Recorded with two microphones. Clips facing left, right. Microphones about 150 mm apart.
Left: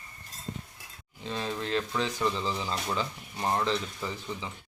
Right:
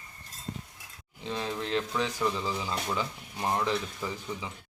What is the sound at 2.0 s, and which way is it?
Speech, 10° right (ahead or behind).